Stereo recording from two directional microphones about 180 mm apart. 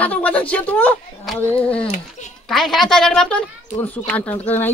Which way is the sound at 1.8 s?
40° left (ahead or behind).